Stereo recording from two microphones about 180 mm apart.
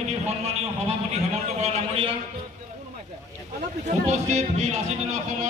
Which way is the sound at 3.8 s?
40° right (ahead or behind).